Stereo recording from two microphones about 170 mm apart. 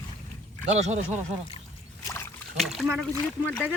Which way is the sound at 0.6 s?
40° right (ahead or behind).